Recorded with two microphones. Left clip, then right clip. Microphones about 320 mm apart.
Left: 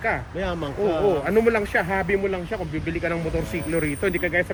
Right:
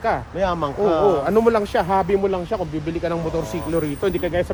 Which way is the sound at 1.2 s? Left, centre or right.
Centre.